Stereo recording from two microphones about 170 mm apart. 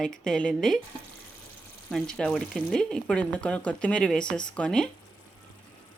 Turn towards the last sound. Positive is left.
turn(degrees=5)  # may be behind; listen again after turning